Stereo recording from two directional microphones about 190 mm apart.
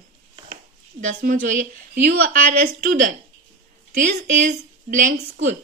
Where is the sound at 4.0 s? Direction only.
40° right (ahead or behind).